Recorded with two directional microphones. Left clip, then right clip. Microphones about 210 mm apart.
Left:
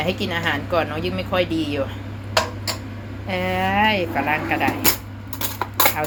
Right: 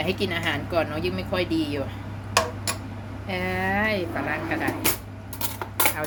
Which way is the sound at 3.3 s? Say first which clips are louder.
Left 5 dB; 10° right (ahead or behind).